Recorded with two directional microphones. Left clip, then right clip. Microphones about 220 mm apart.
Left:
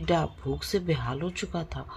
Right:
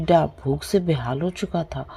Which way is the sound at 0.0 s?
30° right (ahead or behind).